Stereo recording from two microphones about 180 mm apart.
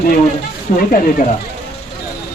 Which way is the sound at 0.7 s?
50° left (ahead or behind).